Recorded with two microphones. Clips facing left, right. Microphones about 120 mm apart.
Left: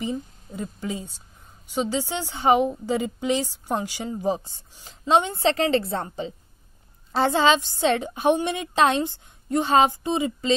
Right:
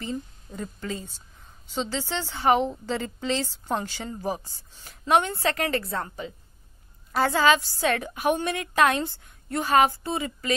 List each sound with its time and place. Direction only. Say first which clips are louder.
0.0 s a woman's voice: left 4 dB; 15° left (ahead or behind)